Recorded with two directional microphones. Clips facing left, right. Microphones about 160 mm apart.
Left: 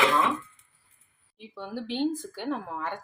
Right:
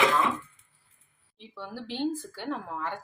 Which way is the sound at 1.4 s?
15° left (ahead or behind).